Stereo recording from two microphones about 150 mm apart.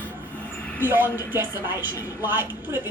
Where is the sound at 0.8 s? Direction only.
15° right (ahead or behind).